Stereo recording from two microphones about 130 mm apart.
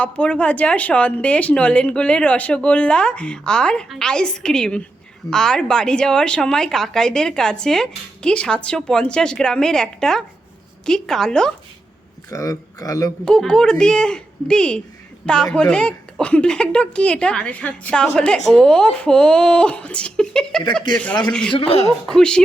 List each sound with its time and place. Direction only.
0.0 s a woman's voice: 10° left (ahead or behind)
12.3 s speech: 25° left (ahead or behind)
13.2 s a woman's voice: 5° left (ahead or behind)
21.5 s speech: 50° left (ahead or behind)
22.0 s speech: 5° left (ahead or behind)